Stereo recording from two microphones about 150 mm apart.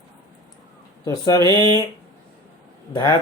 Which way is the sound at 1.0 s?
25° left (ahead or behind).